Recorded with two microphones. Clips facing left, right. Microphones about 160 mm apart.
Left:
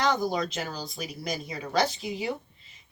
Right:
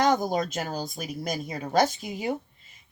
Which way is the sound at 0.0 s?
50° right (ahead or behind).